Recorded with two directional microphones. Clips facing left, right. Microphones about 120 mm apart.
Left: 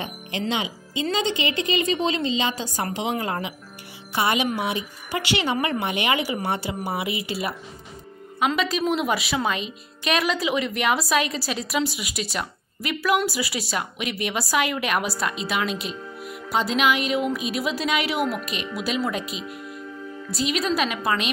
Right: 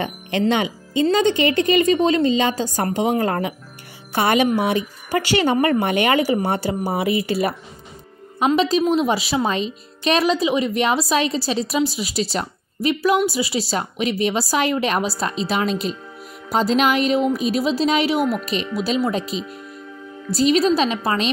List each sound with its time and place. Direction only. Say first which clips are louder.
0.0 s a woman's voice: right 8 dB; 60° right (ahead or behind)
8.4 s a woman's voice: right 6 dB; 30° right (ahead or behind)